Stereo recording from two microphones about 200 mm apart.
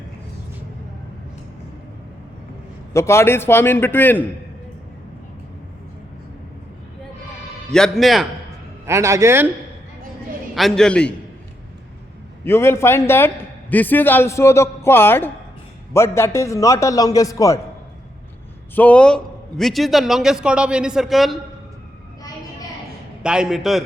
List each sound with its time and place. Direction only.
2.9 s a man's voice: 15° left (ahead or behind)
7.7 s a man's voice: centre (ahead or behind)
8.9 s speech: 15° right (ahead or behind)
10.5 s a man's voice: centre (ahead or behind)
12.5 s a man's voice: 10° left (ahead or behind)
18.7 s a man's voice: 10° left (ahead or behind)
23.2 s a man's voice: 5° right (ahead or behind)